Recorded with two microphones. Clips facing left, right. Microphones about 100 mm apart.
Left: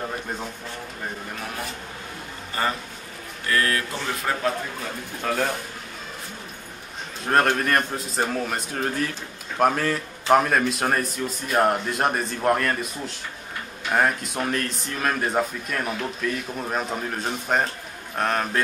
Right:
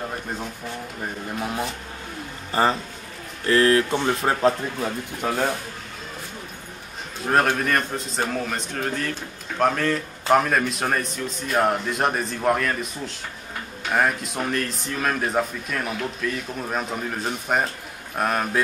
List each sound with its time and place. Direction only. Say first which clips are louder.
1.4 s speech: right 7 dB; 20° right (ahead or behind)
3.4 s speech: right 6 dB; 25° right (ahead or behind)
5.2 s speech: right 1 dB; 10° right (ahead or behind)
7.2 s a man's voice: even; centre (ahead or behind)